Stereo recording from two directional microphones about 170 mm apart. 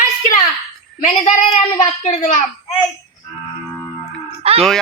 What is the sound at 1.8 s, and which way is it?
Speech, 45° left (ahead or behind).